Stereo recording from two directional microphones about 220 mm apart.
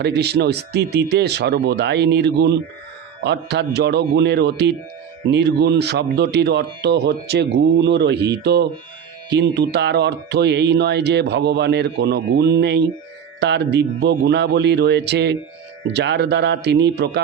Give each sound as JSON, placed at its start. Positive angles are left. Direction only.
{"t": 0.0, "sound": "speech", "side_deg": -50}